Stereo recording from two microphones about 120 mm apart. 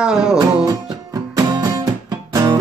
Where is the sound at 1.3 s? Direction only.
30° right (ahead or behind).